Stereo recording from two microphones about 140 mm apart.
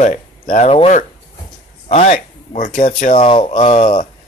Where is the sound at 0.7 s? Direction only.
45° left (ahead or behind); by 3.3 s 75° left (ahead or behind).